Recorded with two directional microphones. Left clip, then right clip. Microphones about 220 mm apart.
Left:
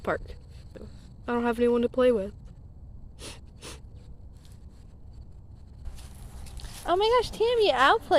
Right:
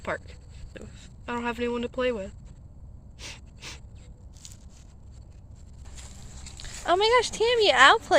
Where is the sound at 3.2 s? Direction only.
40° left (ahead or behind).